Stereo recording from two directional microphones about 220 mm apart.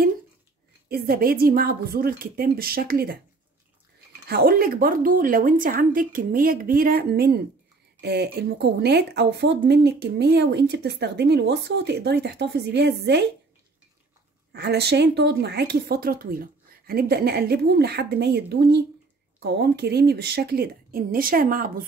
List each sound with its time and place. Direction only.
0.8 s speech: 45° right (ahead or behind)
4.3 s a woman's voice: 45° right (ahead or behind)
14.5 s speech: 50° right (ahead or behind)